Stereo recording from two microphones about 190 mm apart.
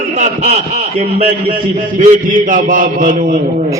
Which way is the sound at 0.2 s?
40° right (ahead or behind).